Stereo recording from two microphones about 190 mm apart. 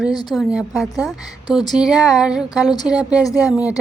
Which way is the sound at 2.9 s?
5° right (ahead or behind).